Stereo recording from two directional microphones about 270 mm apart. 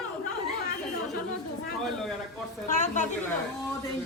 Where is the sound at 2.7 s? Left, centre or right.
Left.